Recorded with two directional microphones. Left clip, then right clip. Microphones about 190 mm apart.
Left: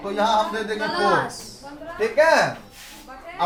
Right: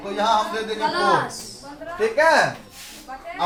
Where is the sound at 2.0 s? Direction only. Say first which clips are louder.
Even; 15° right (ahead or behind).